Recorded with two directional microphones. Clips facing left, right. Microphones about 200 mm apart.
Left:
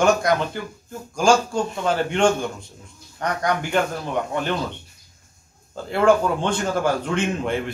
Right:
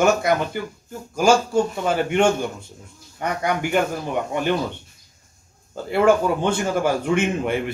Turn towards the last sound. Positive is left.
turn(degrees=-10)  # may be behind; listen again after turning